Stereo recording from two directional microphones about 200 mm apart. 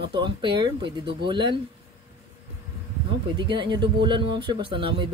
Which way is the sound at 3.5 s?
25° right (ahead or behind).